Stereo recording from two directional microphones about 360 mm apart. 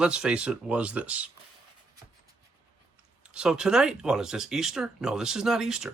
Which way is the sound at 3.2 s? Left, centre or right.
Centre.